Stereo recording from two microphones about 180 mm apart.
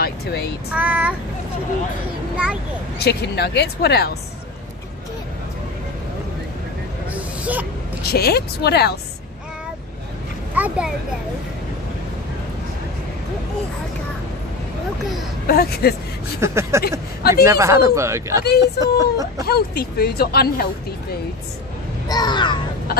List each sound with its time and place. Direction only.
0.0 s a sound: 65° left (ahead or behind)
0.7 s speech: 10° right (ahead or behind)
2.3 s a child's voice: 5° right (ahead or behind)
3.0 s speech: 65° left (ahead or behind)
8.0 s speech: 60° left (ahead or behind)
10.5 s a sound: 10° right (ahead or behind)
15.4 s speech: 55° left (ahead or behind)
16.3 s speech: 15° right (ahead or behind)
17.2 s speech: 60° left (ahead or behind)
17.5 s speech: 15° right (ahead or behind)
19.4 s speech: 60° left (ahead or behind)
22.0 s speech: 20° left (ahead or behind)